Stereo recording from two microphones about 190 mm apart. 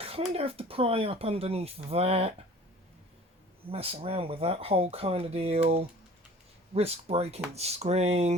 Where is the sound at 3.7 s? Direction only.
30° right (ahead or behind).